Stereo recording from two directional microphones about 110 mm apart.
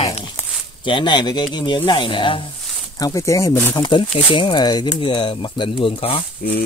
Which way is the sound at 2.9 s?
35° left (ahead or behind).